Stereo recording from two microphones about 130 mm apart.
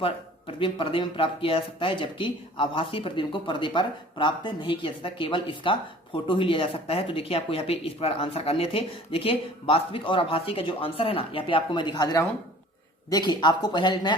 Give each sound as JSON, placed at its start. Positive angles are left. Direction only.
{"t": 0.0, "sound": "speech", "side_deg": 45}